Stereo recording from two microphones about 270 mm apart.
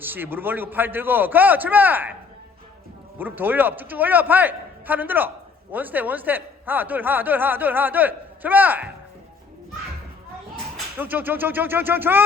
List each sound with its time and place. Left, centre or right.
0.0 s speech: centre
3.2 s speech: centre
10.9 s speech: centre